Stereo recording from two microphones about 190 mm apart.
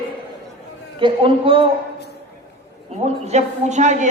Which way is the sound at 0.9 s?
25° right (ahead or behind).